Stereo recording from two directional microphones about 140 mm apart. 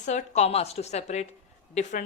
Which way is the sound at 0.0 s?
60° left (ahead or behind).